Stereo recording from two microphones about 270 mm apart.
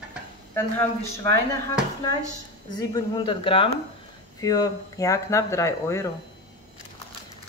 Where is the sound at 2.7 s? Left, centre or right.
Centre.